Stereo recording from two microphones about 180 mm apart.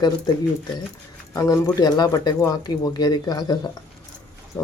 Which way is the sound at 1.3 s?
20° left (ahead or behind).